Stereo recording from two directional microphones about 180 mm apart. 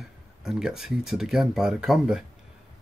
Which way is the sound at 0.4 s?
Centre (ahead or behind).